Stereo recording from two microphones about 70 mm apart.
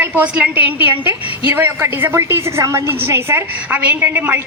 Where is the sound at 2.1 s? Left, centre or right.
Right.